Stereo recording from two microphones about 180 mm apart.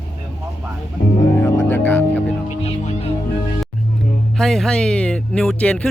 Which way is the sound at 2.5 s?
40° left (ahead or behind).